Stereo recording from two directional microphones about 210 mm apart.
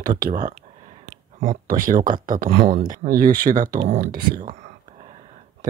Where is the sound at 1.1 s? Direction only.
35° right (ahead or behind).